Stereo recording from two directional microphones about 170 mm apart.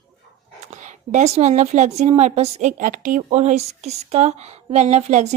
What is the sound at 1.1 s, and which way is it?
A woman's voice, 40° right (ahead or behind).